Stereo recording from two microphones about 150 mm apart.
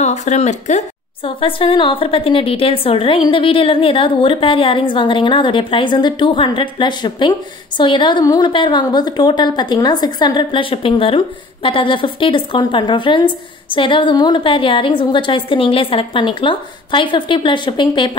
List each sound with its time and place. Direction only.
0.0 s speech: 50° left (ahead or behind)
1.2 s a woman's voice: 35° left (ahead or behind)